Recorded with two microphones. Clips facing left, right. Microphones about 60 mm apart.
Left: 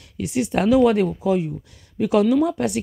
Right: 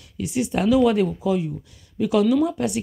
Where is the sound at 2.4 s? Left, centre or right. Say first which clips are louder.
Left 1 dB; left.